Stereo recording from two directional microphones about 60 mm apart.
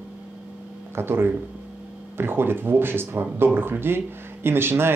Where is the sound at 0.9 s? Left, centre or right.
Right.